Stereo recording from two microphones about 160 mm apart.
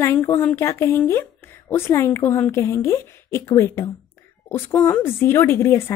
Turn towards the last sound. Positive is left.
turn(degrees=15)  # may be behind; listen again after turning